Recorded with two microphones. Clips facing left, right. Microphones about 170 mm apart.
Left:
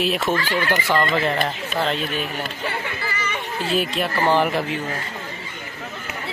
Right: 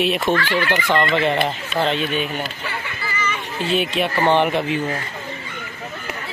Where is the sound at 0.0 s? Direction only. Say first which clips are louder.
Right 2 dB; centre (ahead or behind).